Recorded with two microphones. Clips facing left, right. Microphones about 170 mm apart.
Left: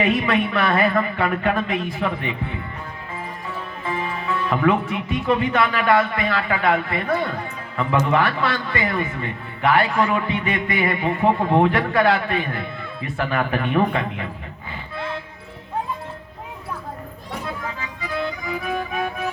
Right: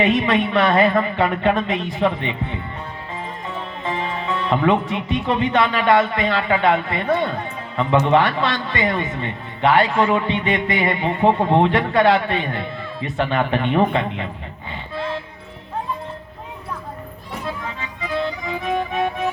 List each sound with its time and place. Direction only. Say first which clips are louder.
0.0 s speech: right 2 dB; 25° right (ahead or behind)
17.7 s music: right 3 dB; 25° right (ahead or behind)